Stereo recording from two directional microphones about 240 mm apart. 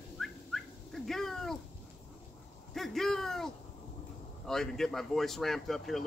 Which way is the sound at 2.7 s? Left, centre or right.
Centre.